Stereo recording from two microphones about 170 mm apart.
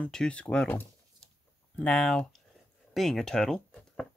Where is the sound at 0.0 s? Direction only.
5° left (ahead or behind).